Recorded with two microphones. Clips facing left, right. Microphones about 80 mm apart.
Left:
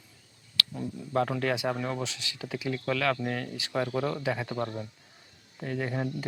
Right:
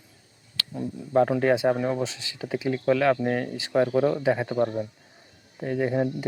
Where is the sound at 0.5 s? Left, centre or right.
Right.